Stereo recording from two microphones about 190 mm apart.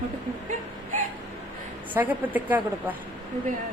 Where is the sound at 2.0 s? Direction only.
10° right (ahead or behind).